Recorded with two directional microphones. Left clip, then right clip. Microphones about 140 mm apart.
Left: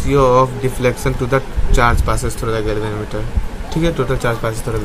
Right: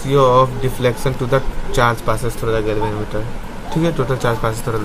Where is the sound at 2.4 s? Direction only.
35° left (ahead or behind).